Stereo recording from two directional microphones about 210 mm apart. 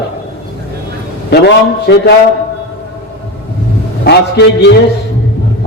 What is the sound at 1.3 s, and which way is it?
Speech, 50° left (ahead or behind).